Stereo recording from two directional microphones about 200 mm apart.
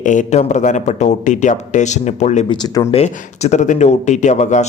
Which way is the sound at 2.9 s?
35° left (ahead or behind).